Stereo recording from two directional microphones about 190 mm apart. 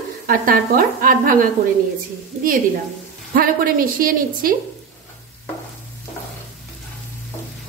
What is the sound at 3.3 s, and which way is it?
A woman's voice, 50° right (ahead or behind).